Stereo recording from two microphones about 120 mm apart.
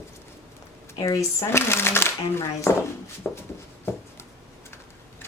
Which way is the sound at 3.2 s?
10° left (ahead or behind).